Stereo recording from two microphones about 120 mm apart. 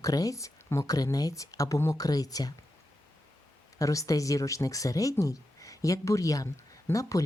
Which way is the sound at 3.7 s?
30° left (ahead or behind).